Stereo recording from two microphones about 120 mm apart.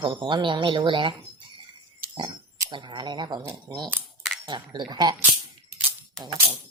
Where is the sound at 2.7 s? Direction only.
40° right (ahead or behind).